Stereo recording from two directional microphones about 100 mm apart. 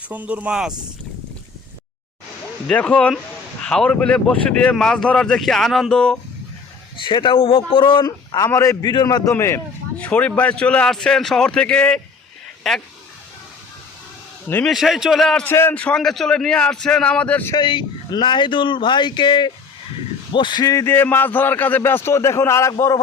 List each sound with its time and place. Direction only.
0.1 s speech: 15° right (ahead or behind)
2.7 s speech: 15° left (ahead or behind)
6.9 s a man's voice: 55° left (ahead or behind)
8.0 s a man's voice: 40° left (ahead or behind)
8.4 s a man's voice: 30° left (ahead or behind)
8.8 s speech: 45° left (ahead or behind)
9.3 s a man's voice: 25° left (ahead or behind)
10.0 s a man's voice: 15° left (ahead or behind)
14.4 s speech: 15° left (ahead or behind)
14.7 s a man's voice: 5° right (ahead or behind)
15.4 s speech: 20° left (ahead or behind)
17.5 s speech: 50° left (ahead or behind)
20.7 s a man's voice: 20° left (ahead or behind)